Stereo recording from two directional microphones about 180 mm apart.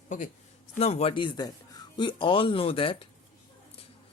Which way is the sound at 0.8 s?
35° left (ahead or behind).